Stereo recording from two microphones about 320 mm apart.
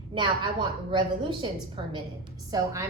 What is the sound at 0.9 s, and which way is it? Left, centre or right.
A woman's voice, centre.